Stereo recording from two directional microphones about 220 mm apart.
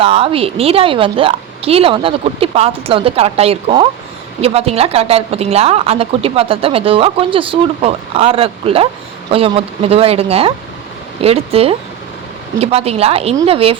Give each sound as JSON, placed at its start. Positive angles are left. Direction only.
{"t": 0.0, "sound": "a woman's voice", "side_deg": -25}